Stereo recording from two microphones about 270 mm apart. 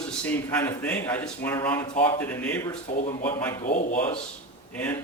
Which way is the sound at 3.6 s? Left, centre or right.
Left.